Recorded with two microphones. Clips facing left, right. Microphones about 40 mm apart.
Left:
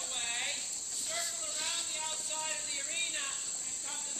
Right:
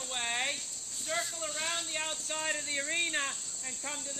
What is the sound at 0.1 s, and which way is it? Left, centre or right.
Cricket, right.